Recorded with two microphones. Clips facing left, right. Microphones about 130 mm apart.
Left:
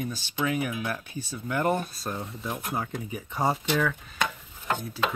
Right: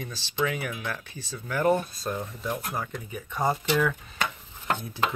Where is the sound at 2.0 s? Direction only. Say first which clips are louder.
Right 2 dB; centre (ahead or behind).